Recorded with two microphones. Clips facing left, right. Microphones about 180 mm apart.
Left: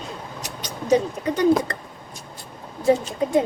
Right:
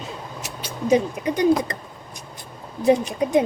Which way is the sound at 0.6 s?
10° right (ahead or behind).